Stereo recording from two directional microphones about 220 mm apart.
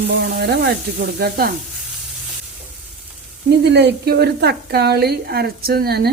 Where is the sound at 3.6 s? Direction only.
50° right (ahead or behind).